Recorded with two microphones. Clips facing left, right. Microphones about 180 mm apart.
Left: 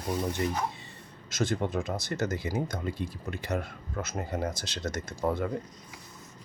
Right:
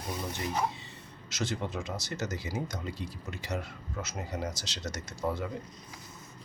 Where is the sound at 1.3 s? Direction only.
50° left (ahead or behind).